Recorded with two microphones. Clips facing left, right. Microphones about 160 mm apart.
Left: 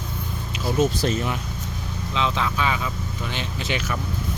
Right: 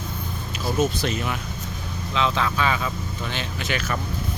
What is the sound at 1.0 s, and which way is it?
Speech, 40° left (ahead or behind).